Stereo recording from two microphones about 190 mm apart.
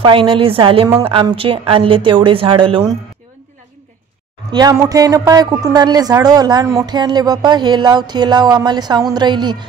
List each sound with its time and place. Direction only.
0.0 s a woman's voice: 25° right (ahead or behind)
4.5 s a woman's voice: 20° right (ahead or behind)